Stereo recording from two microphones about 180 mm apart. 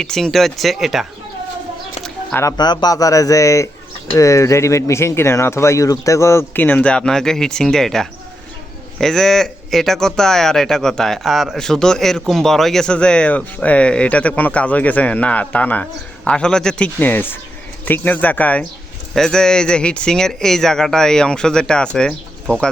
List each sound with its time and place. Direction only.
0.0 s speech: 5° left (ahead or behind)
2.0 s speech: 15° left (ahead or behind)